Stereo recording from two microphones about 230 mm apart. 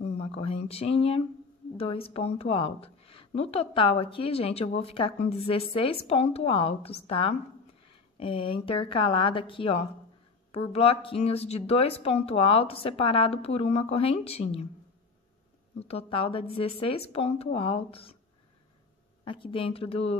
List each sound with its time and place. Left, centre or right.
0.0 s a sound: left
0.7 s a woman's voice: left
15.8 s a woman's voice: left
19.2 s a woman's voice: left